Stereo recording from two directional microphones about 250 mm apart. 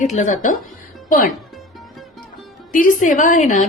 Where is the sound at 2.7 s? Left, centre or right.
Left.